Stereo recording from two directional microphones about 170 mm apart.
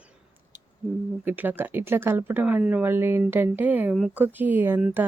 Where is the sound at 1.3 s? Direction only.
10° right (ahead or behind).